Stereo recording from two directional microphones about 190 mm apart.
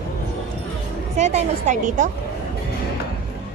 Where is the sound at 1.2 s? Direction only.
35° right (ahead or behind).